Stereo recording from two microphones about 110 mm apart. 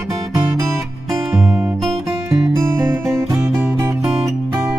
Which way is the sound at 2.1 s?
25° right (ahead or behind).